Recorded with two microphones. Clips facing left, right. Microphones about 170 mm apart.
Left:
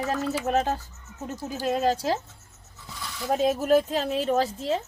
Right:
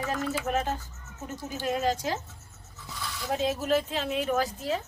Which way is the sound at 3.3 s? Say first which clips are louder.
Left 5 dB; 45° left (ahead or behind).